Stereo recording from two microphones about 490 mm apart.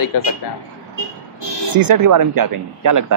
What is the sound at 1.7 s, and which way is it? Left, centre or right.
Speech, right.